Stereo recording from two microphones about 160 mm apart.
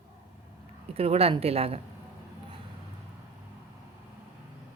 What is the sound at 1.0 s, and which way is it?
Speech, 40° right (ahead or behind).